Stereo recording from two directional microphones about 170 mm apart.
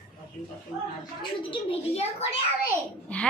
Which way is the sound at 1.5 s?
35° left (ahead or behind).